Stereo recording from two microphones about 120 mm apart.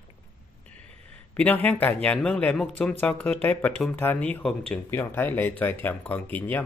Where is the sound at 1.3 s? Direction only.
15° left (ahead or behind).